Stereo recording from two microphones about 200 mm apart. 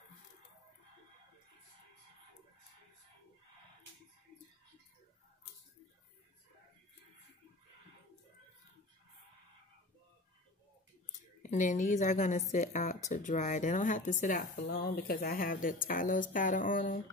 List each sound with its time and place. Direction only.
11.4 s a woman's voice: 40° left (ahead or behind)